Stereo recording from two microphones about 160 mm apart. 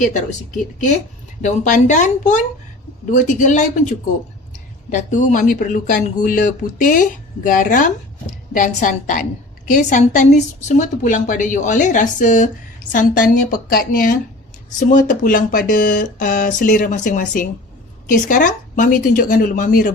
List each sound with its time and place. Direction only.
0.0 s a woman's voice: 50° left (ahead or behind)
1.4 s a woman's voice: 50° left (ahead or behind)